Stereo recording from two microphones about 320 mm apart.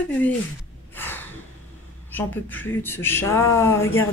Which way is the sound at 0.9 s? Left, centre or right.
Centre.